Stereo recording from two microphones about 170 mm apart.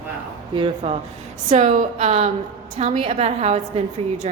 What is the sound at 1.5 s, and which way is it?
A woman's voice, 45° right (ahead or behind).